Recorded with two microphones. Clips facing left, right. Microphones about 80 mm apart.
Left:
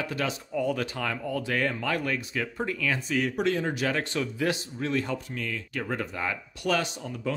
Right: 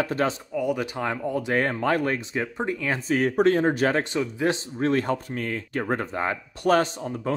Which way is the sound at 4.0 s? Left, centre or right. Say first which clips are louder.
Right 4 dB; right.